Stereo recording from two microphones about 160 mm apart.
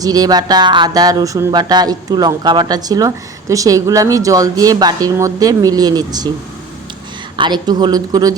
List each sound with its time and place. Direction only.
0.0 s speech: 25° right (ahead or behind)
7.3 s speech: 30° right (ahead or behind)